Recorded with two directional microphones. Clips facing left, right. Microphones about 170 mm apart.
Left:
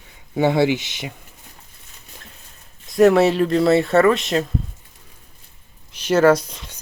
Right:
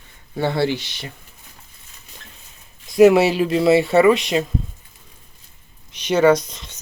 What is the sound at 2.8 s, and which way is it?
Speech, centre (ahead or behind).